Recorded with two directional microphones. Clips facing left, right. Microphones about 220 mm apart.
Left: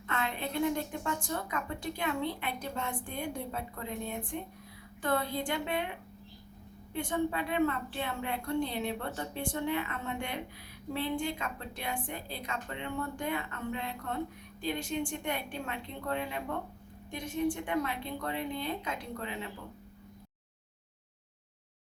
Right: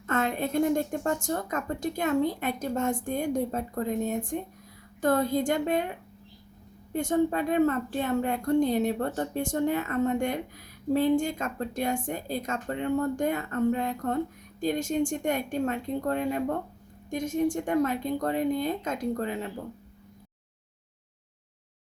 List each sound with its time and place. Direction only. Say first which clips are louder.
0.1 s speech: right 8 dB; 45° right (ahead or behind)
6.9 s speech: right 7 dB; 45° right (ahead or behind)